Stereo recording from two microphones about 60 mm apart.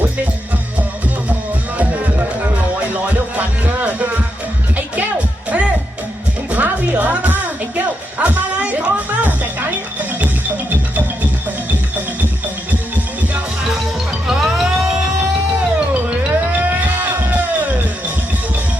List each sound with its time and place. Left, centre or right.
1.8 s music: right
5.5 s music: right
14.3 s music: centre
16.0 s music: right